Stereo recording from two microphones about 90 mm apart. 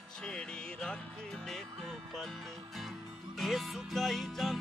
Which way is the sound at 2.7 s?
Centre (ahead or behind).